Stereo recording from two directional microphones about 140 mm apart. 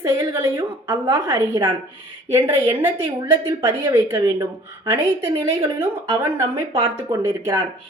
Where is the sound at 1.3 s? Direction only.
30° right (ahead or behind).